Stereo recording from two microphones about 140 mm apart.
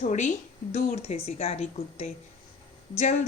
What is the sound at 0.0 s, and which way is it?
A woman's voice, 55° left (ahead or behind).